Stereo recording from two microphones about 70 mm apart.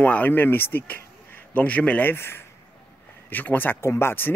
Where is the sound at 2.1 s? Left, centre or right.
Left.